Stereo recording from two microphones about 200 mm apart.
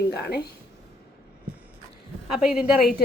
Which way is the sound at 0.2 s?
55° left (ahead or behind).